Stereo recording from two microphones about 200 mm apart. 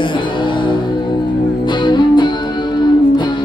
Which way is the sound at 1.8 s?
25° left (ahead or behind).